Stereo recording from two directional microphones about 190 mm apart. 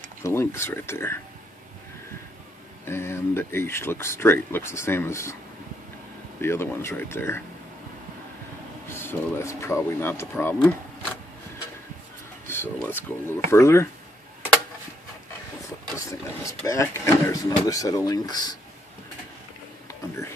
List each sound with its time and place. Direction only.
0.2 s speech: 15° left (ahead or behind)
2.8 s speech: 15° left (ahead or behind)
6.4 s speech: 15° left (ahead or behind)
8.8 s speech: 10° left (ahead or behind)
12.5 s a sound: 10° left (ahead or behind)
12.8 s speech: 10° left (ahead or behind)
16.1 s speech: 15° left (ahead or behind)